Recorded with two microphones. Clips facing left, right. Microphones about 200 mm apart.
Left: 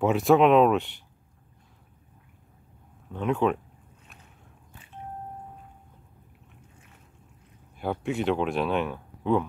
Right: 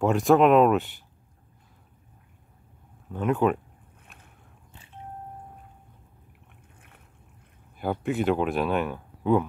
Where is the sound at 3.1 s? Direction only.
5° right (ahead or behind).